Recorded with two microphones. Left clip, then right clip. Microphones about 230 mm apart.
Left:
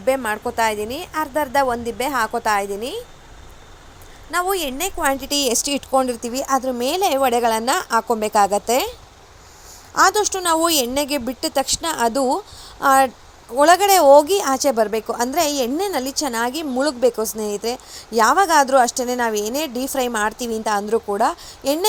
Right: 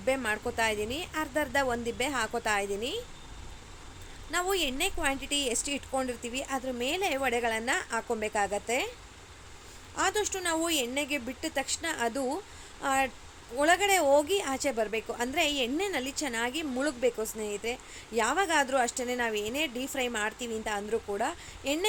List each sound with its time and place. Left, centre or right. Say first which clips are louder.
0.0 s a woman's voice: left 9 dB; centre
4.3 s a woman's voice: left 9 dB; centre; by 8.9 s left
10.2 s a woman's voice: left 12 dB; left